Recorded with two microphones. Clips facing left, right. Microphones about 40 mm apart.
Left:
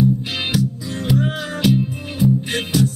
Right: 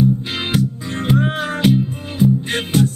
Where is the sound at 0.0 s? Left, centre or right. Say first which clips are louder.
Right 1 dB; right.